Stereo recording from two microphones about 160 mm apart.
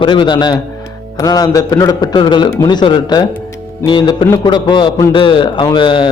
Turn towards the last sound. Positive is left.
turn(degrees=30)  # may be behind; listen again after turning